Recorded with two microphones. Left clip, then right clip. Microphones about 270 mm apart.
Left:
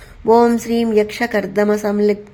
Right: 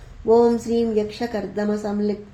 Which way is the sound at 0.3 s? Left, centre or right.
Left.